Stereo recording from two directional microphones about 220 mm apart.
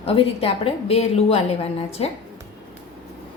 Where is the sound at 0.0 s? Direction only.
25° left (ahead or behind).